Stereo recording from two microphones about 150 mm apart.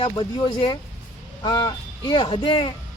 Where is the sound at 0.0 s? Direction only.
35° left (ahead or behind).